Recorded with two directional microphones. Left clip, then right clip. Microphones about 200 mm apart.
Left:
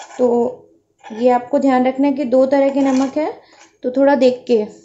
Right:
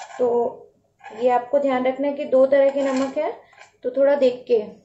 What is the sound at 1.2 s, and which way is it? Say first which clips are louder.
A woman's voice: left 4 dB; 50° left (ahead or behind).